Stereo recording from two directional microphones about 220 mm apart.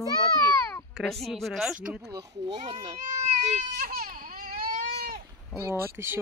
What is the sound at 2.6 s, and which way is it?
Speech, 30° right (ahead or behind).